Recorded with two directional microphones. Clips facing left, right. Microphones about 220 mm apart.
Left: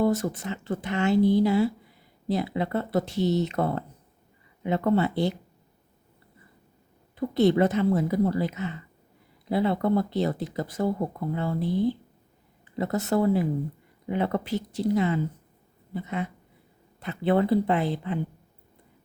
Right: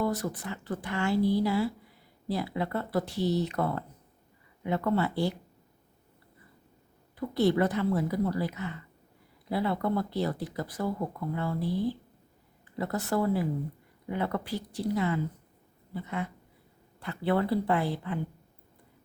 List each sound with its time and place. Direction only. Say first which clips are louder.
0.0 s speech: left 6 dB; 25° left (ahead or behind)
7.2 s speech: left 4 dB; 20° left (ahead or behind)